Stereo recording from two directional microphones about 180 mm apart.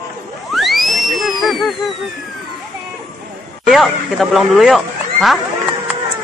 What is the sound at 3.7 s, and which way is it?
Speech, centre (ahead or behind).